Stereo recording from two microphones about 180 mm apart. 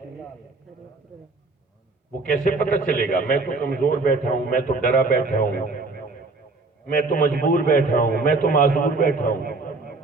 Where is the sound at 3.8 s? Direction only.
50° left (ahead or behind).